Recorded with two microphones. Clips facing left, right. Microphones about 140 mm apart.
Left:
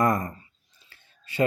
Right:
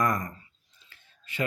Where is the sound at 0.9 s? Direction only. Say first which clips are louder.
Left 6 dB; 30° left (ahead or behind).